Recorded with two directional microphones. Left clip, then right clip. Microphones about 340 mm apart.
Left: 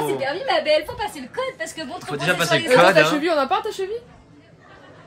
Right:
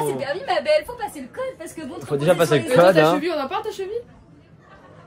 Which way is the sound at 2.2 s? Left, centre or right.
Centre.